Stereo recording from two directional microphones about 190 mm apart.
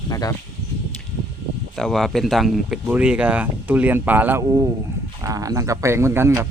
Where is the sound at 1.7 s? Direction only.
Centre (ahead or behind).